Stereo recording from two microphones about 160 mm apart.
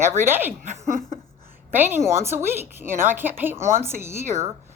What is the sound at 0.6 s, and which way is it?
Speech, 50° right (ahead or behind).